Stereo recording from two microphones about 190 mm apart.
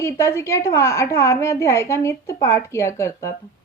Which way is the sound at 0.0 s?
15° left (ahead or behind).